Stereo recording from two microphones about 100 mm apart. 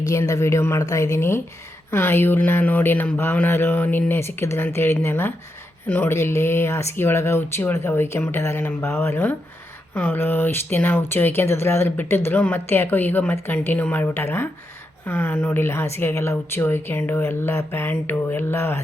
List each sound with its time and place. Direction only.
0.1 s speech: 30° left (ahead or behind)